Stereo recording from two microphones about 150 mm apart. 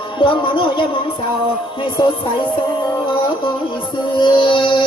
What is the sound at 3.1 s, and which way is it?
Music, 35° left (ahead or behind).